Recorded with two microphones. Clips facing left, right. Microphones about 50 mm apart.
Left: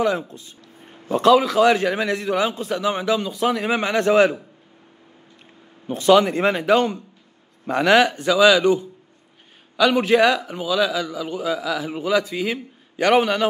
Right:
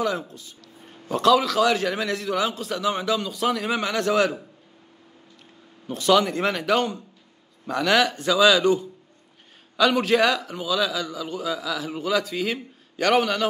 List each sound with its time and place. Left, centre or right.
0.3 s a man's voice: left
5.9 s a man's voice: left; by 12.5 s centre
12.9 s a man's voice: left